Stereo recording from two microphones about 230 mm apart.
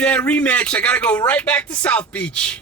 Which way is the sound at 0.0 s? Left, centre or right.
Centre.